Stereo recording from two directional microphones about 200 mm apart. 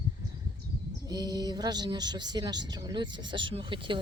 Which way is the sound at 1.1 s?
20° right (ahead or behind).